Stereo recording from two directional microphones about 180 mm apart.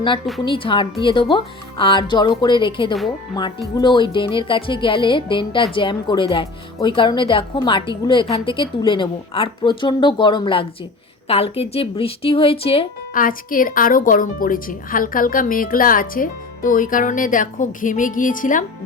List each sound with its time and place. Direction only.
0.4 s a woman's voice: 30° left (ahead or behind)
13.1 s a woman's voice: 50° left (ahead or behind)